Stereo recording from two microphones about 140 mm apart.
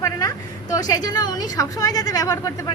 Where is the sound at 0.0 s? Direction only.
25° left (ahead or behind).